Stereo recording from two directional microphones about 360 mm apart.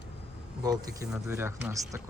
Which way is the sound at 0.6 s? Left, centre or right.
Centre.